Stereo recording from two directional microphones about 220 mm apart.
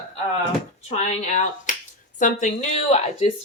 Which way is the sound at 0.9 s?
30° left (ahead or behind).